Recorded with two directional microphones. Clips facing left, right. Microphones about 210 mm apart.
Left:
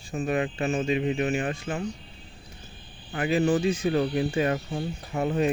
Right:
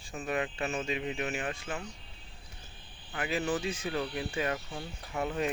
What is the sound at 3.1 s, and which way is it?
Speech, 35° left (ahead or behind).